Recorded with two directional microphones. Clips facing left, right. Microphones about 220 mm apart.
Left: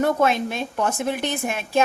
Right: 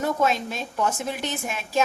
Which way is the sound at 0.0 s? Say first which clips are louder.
Left 4 dB; 60° left (ahead or behind).